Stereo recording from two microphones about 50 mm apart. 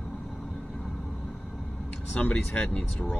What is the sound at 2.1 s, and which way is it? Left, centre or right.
Speech, left.